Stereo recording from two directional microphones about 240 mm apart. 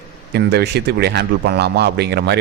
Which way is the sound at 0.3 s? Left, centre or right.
Right.